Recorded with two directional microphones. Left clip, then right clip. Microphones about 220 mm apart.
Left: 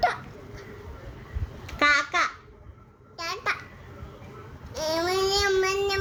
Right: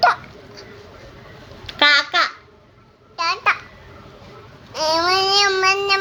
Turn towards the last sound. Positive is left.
turn(degrees=15)  # may be behind; listen again after turning